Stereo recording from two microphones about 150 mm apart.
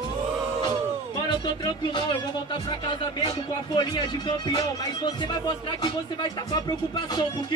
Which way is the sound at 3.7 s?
30° left (ahead or behind).